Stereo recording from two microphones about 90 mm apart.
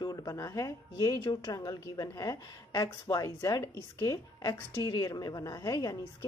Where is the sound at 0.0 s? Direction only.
40° left (ahead or behind).